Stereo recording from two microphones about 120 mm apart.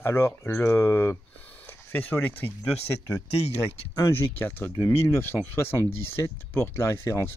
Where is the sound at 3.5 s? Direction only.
20° left (ahead or behind).